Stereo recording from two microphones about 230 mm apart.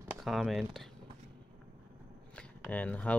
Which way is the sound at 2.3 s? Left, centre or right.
Centre.